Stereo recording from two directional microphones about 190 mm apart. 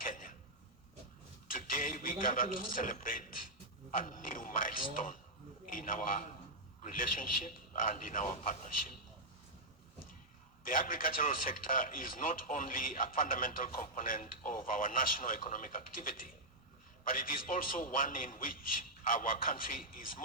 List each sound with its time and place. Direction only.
0.0 s a sound: 45° left (ahead or behind)
1.5 s a man's voice: 45° left (ahead or behind)
10.7 s speech: 45° left (ahead or behind)